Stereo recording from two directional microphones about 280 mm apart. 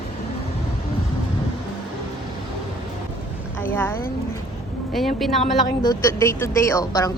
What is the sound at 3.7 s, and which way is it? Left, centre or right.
Speech, centre.